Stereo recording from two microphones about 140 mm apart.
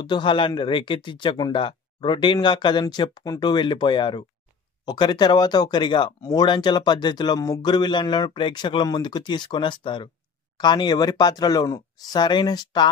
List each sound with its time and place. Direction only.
0.0 s speech: 35° left (ahead or behind)